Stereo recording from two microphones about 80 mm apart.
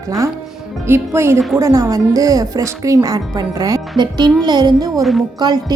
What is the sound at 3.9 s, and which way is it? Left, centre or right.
A woman's voice, right.